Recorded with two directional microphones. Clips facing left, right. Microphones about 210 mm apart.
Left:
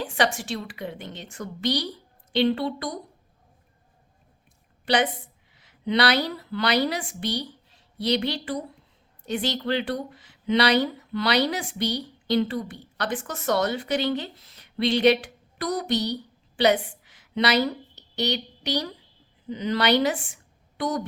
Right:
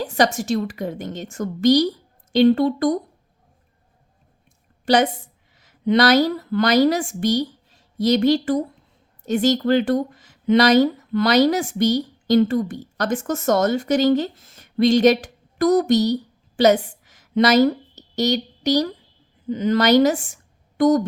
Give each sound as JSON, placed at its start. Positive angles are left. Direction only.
{"t": 0.0, "sound": "speech", "side_deg": -40}
{"t": 4.9, "sound": "a woman's voice", "side_deg": -45}